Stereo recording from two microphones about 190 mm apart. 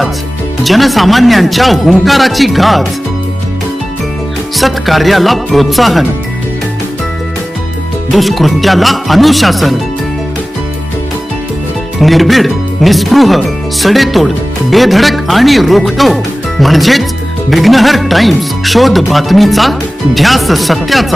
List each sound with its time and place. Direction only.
0.6 s speech: centre (ahead or behind)
4.5 s speech: centre (ahead or behind)
8.1 s speech: centre (ahead or behind)
11.9 s speech: centre (ahead or behind)